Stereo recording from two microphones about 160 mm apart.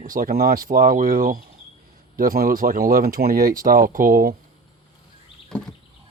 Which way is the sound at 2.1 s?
65° right (ahead or behind).